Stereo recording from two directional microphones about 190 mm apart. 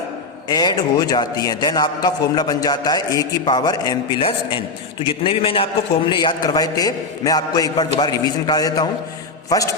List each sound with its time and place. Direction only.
0.4 s a man's voice: 20° left (ahead or behind)